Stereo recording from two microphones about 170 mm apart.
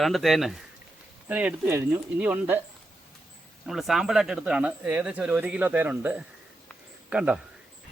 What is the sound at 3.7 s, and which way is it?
Speech, centre (ahead or behind).